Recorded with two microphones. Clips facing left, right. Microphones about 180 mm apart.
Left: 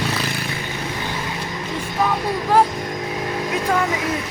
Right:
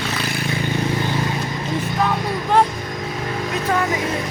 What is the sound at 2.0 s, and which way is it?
Speech, 5° left (ahead or behind).